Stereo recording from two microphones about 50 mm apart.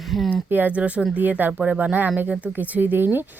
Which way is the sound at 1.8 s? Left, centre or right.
Right.